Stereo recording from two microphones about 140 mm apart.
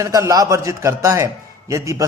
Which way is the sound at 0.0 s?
25° right (ahead or behind).